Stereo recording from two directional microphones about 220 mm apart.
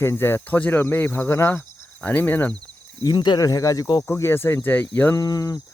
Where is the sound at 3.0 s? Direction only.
20° left (ahead or behind).